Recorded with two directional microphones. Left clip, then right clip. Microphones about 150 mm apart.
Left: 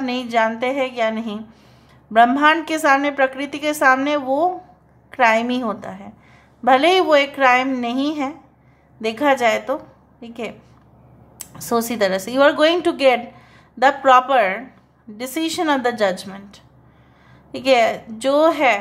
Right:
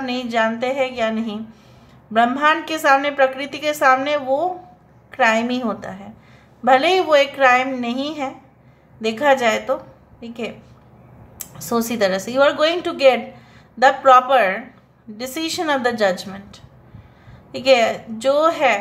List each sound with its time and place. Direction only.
0.0 s a woman's voice: 25° left (ahead or behind)